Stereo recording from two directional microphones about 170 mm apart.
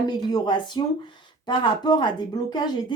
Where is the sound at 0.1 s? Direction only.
25° left (ahead or behind).